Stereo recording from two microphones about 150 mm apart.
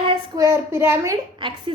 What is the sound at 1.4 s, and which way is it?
Speech, 35° right (ahead or behind).